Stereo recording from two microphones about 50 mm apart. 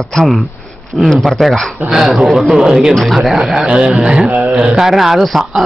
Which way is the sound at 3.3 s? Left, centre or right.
Centre.